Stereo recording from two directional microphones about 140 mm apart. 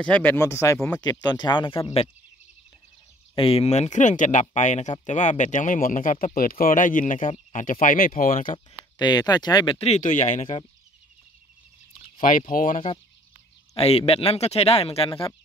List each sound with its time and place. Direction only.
0.0 s speech: 10° left (ahead or behind); by 1.9 s 35° left (ahead or behind)
3.3 s speech: 45° left (ahead or behind); by 8.5 s 75° left (ahead or behind)
8.9 s speech: 30° left (ahead or behind)
9.8 s speech: 55° left (ahead or behind)
12.2 s speech: 70° left (ahead or behind)
13.7 s speech: 45° left (ahead or behind)